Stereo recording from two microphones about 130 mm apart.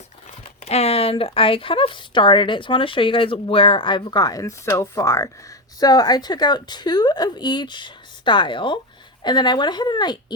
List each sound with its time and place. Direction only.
0.6 s speech: 55° left (ahead or behind); by 10.3 s 35° left (ahead or behind)